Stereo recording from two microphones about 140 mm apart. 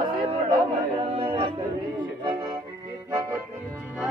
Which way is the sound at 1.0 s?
45° right (ahead or behind).